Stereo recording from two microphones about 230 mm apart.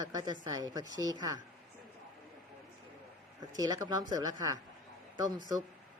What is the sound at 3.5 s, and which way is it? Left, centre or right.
Speech, centre.